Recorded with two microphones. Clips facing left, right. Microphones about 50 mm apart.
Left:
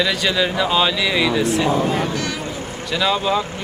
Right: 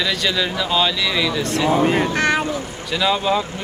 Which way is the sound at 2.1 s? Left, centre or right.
Right.